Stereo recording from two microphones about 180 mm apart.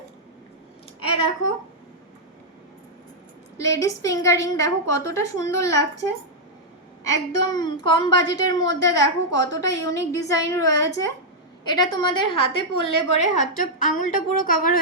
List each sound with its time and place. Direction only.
3.6 s a woman's voice: 15° left (ahead or behind)
7.3 s a woman's voice: 25° left (ahead or behind); by 14.8 s 50° left (ahead or behind)